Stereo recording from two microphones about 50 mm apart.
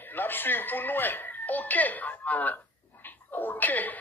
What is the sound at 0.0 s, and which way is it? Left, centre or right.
Speech, left.